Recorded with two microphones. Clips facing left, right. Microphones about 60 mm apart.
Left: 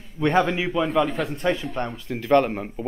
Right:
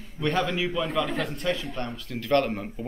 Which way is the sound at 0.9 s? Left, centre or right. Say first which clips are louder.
Left 5 dB; centre.